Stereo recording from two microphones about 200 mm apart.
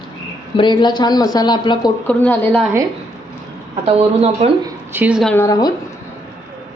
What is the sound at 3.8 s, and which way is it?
Speech, 30° right (ahead or behind).